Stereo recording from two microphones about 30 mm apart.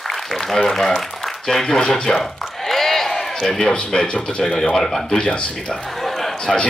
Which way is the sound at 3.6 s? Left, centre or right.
Left.